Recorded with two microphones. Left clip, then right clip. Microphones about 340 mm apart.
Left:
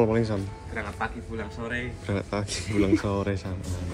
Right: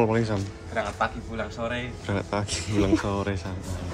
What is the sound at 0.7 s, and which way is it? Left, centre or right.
Speech, right.